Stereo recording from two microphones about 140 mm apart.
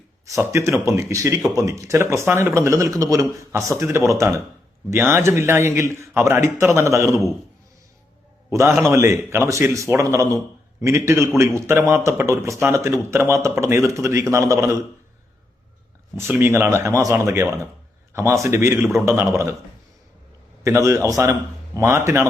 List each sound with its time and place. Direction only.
0.3 s speech: 20° right (ahead or behind)
8.4 s a man's voice: 20° right (ahead or behind)
16.1 s speech: 15° right (ahead or behind)
18.8 s a man's voice: centre (ahead or behind)
19.0 s speech: 20° right (ahead or behind)
20.7 s speech: 20° right (ahead or behind)